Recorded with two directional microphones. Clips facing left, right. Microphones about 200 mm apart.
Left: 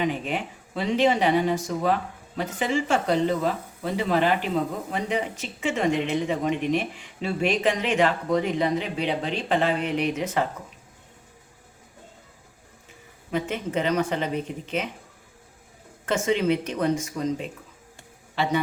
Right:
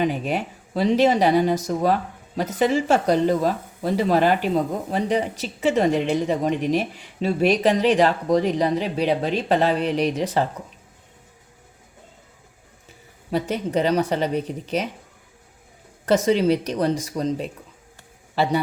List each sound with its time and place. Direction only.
0.0 s speech: 40° right (ahead or behind)
13.3 s speech: 35° right (ahead or behind)
16.0 s speech: 35° right (ahead or behind)